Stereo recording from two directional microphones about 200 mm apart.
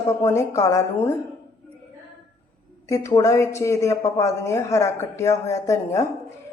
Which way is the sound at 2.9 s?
15° left (ahead or behind).